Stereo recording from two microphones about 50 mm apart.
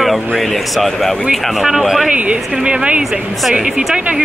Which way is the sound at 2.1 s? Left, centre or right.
Right.